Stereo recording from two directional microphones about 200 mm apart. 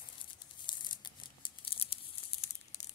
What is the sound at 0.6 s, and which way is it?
Tearing, 20° left (ahead or behind).